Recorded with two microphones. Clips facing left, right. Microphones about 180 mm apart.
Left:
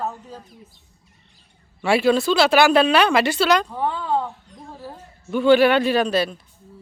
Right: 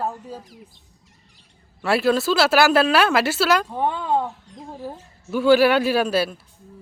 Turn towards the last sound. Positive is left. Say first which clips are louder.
# left 1 dB
turn(degrees=-5)  # may be behind; listen again after turning